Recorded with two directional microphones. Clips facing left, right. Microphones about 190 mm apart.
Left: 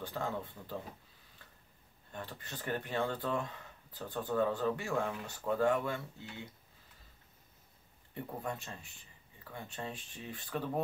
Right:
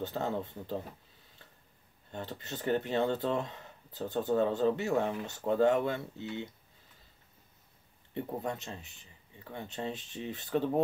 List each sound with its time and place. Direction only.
0.0 s speech: 25° right (ahead or behind)
2.1 s speech: 25° right (ahead or behind)
8.1 s speech: 25° right (ahead or behind)